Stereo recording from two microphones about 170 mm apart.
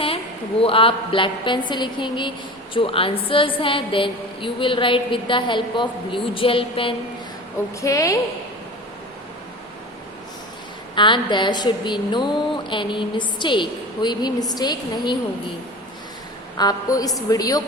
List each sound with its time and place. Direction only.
0.6 s a woman's voice: 30° left (ahead or behind)
7.8 s a woman's voice: 20° left (ahead or behind)
10.9 s a woman's voice: 30° left (ahead or behind)
16.6 s a woman's voice: 20° left (ahead or behind)